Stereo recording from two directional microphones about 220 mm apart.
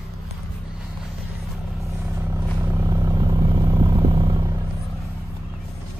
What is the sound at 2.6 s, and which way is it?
Vehicle, 10° right (ahead or behind).